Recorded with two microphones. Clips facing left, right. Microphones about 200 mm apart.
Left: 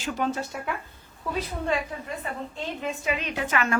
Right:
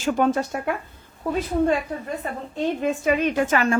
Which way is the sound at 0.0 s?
50° right (ahead or behind).